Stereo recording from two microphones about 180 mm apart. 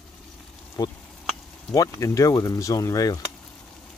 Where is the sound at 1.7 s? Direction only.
20° left (ahead or behind).